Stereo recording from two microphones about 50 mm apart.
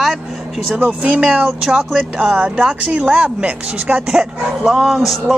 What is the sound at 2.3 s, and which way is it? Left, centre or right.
Speech, right.